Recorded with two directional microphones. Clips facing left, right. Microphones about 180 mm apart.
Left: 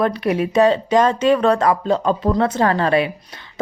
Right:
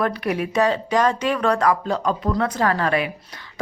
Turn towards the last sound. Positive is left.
turn(degrees=25)  # may be behind; listen again after turning